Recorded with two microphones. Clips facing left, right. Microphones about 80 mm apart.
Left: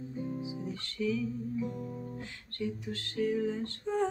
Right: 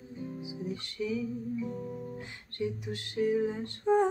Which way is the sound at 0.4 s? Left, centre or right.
Centre.